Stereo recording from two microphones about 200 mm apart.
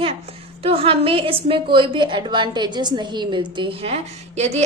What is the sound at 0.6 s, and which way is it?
A woman's voice, 30° right (ahead or behind).